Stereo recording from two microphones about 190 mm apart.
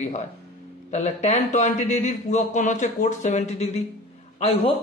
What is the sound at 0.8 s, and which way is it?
A man's voice, 40° left (ahead or behind).